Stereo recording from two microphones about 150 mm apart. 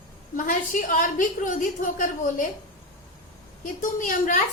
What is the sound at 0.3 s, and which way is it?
A woman's voice, 60° left (ahead or behind).